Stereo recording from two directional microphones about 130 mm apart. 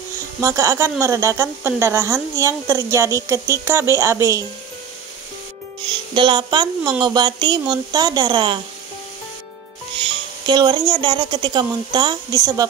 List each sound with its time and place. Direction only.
0.4 s a woman's voice: 25° right (ahead or behind)
6.1 s speech: 35° right (ahead or behind)
10.4 s speech: 35° right (ahead or behind)